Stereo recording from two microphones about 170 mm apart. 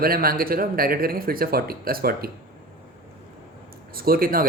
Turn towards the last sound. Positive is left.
turn(degrees=-60)  # may be behind; listen again after turning